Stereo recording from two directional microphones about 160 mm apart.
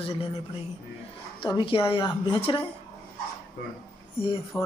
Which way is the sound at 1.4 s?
35° left (ahead or behind).